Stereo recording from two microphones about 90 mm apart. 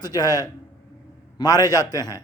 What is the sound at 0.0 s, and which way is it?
A man's voice, 50° left (ahead or behind).